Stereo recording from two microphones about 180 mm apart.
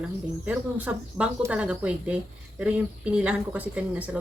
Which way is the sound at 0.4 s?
10° right (ahead or behind).